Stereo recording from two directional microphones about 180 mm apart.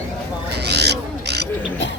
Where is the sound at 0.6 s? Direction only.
65° right (ahead or behind).